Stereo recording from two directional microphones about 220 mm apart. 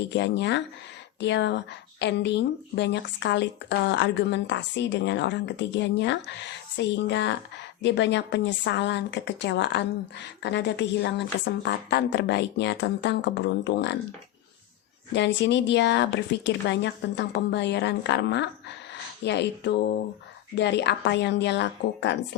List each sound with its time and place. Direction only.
0.1 s speech: 50° left (ahead or behind)
15.1 s speech: 50° left (ahead or behind)